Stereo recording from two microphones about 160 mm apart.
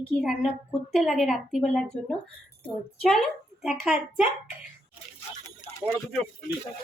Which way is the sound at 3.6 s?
5° right (ahead or behind).